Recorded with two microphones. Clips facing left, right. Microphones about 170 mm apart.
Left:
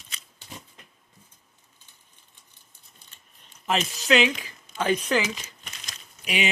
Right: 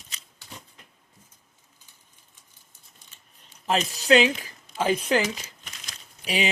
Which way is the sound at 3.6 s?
35° right (ahead or behind).